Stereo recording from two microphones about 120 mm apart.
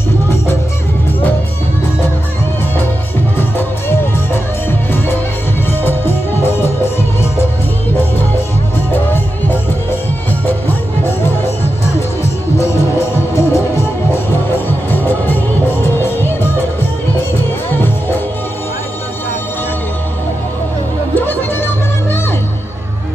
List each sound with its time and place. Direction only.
3.3 s music: 20° left (ahead or behind)
12.2 s music: 25° left (ahead or behind)
14.9 s music: 15° left (ahead or behind)
21.1 s music: 15° left (ahead or behind)